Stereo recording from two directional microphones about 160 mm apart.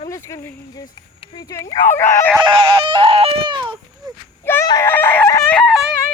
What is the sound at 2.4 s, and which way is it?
Speech, 30° right (ahead or behind).